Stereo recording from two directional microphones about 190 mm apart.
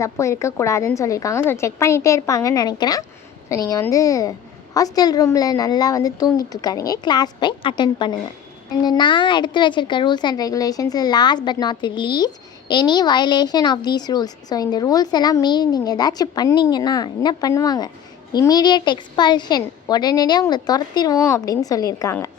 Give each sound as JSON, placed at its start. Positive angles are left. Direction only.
{"t": 0.0, "sound": "a woman's voice", "side_deg": 15}